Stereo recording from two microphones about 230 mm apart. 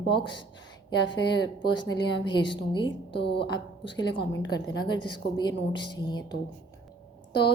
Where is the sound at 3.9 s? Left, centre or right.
Left.